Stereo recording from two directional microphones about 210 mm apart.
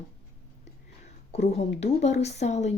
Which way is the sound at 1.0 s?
30° left (ahead or behind).